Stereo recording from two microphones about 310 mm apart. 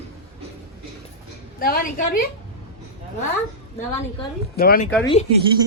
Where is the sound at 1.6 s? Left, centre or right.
Left.